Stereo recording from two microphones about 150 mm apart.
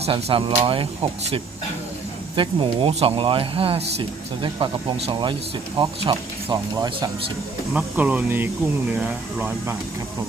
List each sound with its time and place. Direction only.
0.0 s speech: 40° right (ahead or behind)
2.3 s speech: 35° right (ahead or behind)
7.7 s speech: 10° right (ahead or behind)